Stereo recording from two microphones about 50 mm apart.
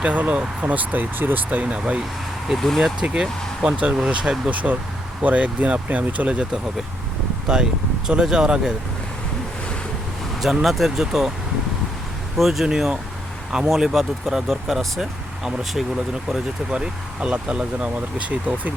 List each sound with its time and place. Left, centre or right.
0.1 s speech: right
1.6 s speech: right
2.6 s speech: centre
3.2 s speech: centre
10.4 s speech: centre
12.4 s speech: centre
12.6 s speech: centre
13.7 s speech: centre
16.7 s speech: centre